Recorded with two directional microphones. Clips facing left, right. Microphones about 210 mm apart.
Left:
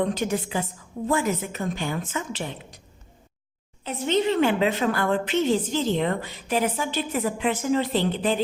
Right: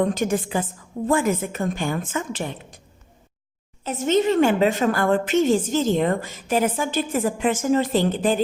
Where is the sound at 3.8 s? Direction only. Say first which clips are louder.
Right 3 dB; 45° right (ahead or behind).